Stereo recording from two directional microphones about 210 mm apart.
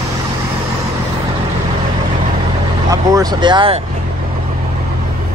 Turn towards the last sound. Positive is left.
turn(degrees=-20)  # may be behind; listen again after turning